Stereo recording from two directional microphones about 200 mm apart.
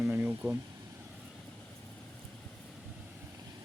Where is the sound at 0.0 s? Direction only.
10° right (ahead or behind).